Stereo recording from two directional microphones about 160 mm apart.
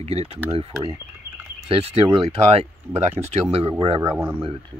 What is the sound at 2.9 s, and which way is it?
Speech, 15° right (ahead or behind).